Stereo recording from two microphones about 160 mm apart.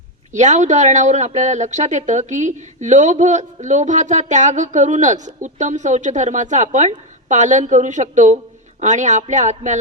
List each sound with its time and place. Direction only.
0.3 s speech: 45° right (ahead or behind)